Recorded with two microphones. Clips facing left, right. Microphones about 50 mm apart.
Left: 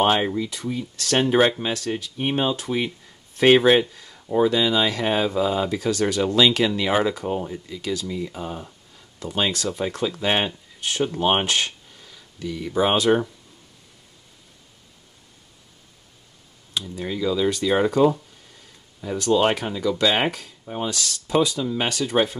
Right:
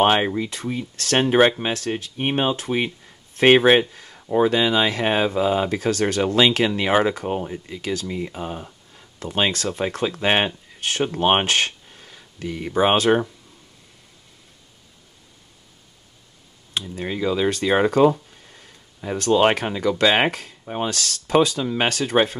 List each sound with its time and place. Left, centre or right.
0.0 s speech: right
1.1 s speech: right
1.6 s speech: right
6.2 s speech: right
10.8 s speech: right
11.1 s speech: right
16.8 s speech: right
19.1 s speech: right
20.9 s speech: right